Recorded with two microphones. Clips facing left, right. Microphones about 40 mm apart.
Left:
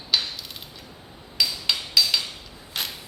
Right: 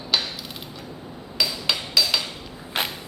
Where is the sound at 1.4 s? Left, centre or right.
Centre.